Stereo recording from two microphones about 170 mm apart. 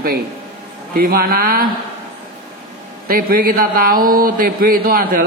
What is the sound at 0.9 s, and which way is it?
Speech, 60° right (ahead or behind).